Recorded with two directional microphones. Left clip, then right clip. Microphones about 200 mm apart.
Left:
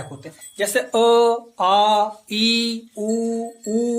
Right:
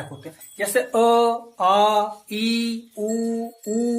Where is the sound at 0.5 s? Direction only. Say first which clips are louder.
Left 1 dB; 40° left (ahead or behind).